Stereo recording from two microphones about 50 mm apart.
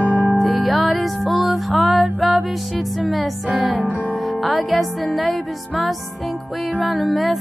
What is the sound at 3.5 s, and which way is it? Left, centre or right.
Music, right.